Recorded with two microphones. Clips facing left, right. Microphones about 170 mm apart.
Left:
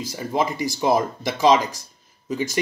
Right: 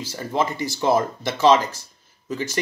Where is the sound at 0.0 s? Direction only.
15° left (ahead or behind).